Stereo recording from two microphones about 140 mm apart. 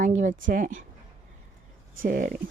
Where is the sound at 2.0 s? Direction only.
90° right.